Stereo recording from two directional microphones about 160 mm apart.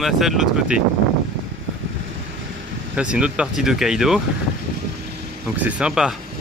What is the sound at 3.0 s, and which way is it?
Speech, 5° right (ahead or behind).